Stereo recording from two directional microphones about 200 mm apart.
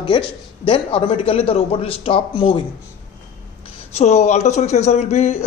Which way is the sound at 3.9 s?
35° left (ahead or behind).